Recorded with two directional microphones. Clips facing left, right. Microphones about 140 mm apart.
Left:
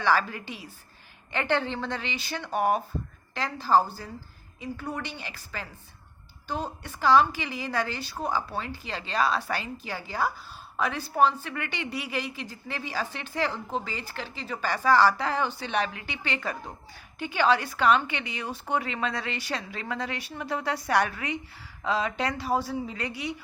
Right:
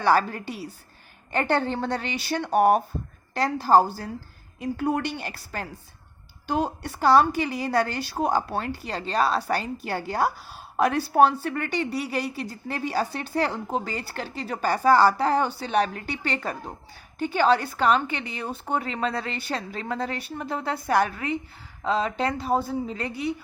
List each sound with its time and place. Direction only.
0.0 s a woman's voice: 40° right (ahead or behind)
3.8 s a woman's voice: 70° right (ahead or behind)
5.3 s speech: 45° right (ahead or behind)
6.8 s a woman's voice: 40° right (ahead or behind)